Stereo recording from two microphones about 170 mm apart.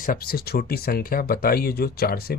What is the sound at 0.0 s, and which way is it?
Speech, 60° left (ahead or behind).